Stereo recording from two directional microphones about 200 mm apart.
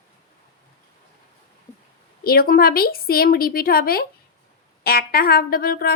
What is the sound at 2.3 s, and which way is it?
A woman's voice, 45° left (ahead or behind).